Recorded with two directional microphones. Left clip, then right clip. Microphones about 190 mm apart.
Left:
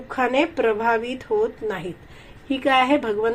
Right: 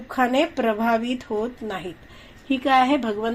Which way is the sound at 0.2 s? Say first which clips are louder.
Left 1 dB; 40° right (ahead or behind).